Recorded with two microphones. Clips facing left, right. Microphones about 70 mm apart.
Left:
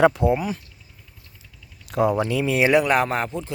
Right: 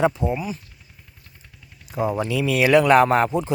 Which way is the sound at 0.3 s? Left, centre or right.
Left.